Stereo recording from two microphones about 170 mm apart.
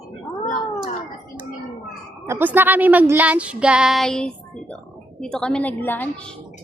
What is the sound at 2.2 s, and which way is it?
A woman's voice, 15° right (ahead or behind).